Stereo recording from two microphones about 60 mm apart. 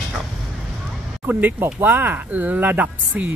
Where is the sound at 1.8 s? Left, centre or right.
Right.